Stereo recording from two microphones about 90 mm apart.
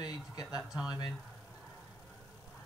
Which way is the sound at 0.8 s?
45° left (ahead or behind).